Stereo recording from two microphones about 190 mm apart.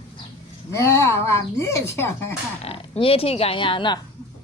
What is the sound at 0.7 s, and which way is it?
Speech, 15° left (ahead or behind).